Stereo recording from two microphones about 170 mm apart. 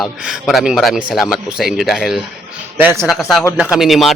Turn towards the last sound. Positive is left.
turn(degrees=0)  # may be behind; listen again after turning